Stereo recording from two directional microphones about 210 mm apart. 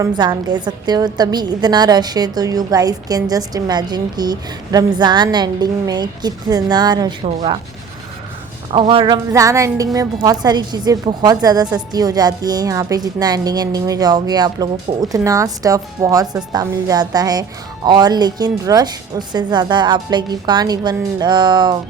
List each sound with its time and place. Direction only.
0.0 s a woman's voice: 20° right (ahead or behind)
8.7 s a woman's voice: 25° right (ahead or behind)